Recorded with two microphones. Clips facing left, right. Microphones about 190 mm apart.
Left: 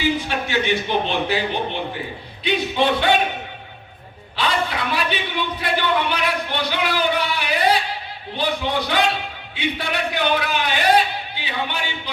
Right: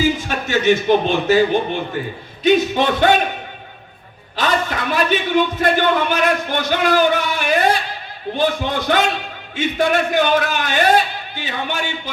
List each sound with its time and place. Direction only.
0.0 s speech: 45° right (ahead or behind)
2.4 s a man's voice: 45° right (ahead or behind)
4.4 s a man's voice: 45° right (ahead or behind)